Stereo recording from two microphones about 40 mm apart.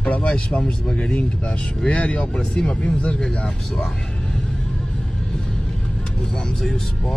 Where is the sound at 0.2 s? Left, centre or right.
Left.